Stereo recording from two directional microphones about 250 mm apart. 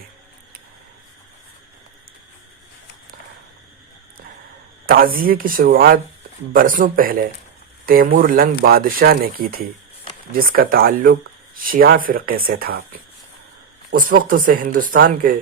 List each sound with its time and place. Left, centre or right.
4.9 s speech: right
13.9 s speech: right